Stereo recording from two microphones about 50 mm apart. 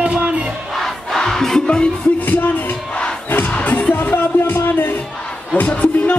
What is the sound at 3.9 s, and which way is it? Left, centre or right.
Music, left.